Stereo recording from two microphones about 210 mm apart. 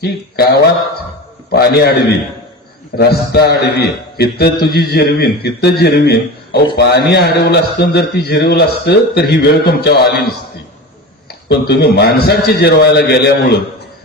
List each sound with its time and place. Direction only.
0.0 s a man's voice: 50° left (ahead or behind)
11.4 s a man's voice: 50° left (ahead or behind)